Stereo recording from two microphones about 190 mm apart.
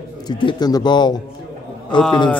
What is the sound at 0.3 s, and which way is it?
A man's voice, 25° left (ahead or behind).